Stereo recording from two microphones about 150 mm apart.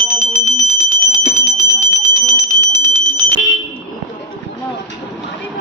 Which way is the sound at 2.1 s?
20° left (ahead or behind).